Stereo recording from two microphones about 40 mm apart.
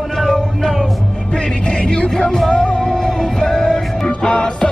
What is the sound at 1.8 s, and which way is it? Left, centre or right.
Music, left.